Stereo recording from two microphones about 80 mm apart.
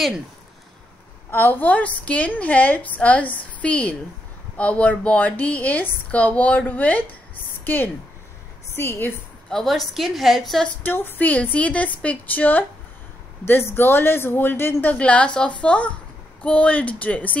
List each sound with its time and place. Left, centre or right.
1.3 s a woman's voice: left
9.5 s a woman's voice: centre
10.8 s a woman's voice: left
15.0 s speech: centre